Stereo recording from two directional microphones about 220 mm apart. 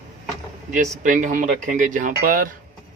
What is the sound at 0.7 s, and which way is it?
Speech, 35° right (ahead or behind).